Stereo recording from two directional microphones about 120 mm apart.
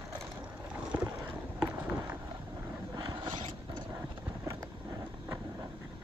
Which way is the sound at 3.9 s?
25° right (ahead or behind).